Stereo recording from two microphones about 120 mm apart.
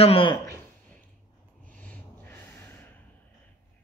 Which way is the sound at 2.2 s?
20° left (ahead or behind).